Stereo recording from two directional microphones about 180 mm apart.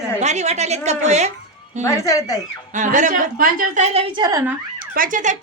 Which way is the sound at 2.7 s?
45° right (ahead or behind).